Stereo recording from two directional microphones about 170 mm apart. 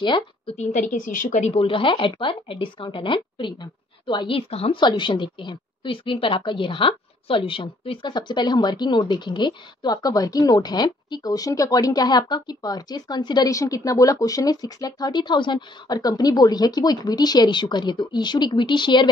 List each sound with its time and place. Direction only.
0.0 s a woman's voice: 30° left (ahead or behind)
0.6 s a woman's voice: 45° left (ahead or behind); by 19.0 s 25° left (ahead or behind)